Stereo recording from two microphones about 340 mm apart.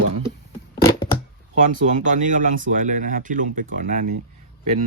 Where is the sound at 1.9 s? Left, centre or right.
Right.